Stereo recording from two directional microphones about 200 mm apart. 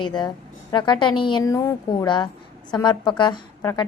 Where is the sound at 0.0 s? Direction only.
20° left (ahead or behind).